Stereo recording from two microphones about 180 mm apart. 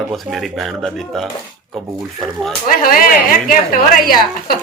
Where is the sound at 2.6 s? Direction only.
50° left (ahead or behind).